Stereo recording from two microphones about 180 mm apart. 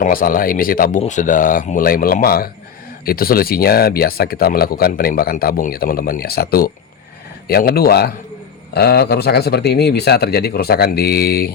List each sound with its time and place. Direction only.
0.0 s speech: 50° left (ahead or behind)